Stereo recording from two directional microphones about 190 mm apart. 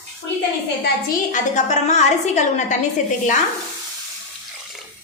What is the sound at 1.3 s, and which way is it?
A woman's voice, 40° left (ahead or behind).